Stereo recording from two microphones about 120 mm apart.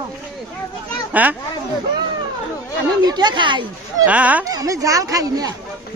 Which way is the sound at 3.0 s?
35° right (ahead or behind).